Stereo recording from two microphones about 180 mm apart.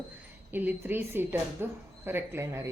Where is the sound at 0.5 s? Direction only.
10° right (ahead or behind).